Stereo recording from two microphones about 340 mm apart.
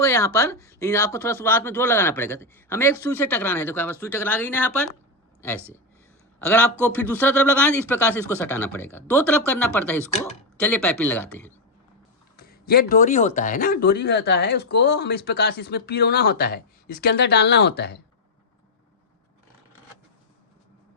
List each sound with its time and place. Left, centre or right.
0.0 s a man's voice: centre
12.4 s speech: left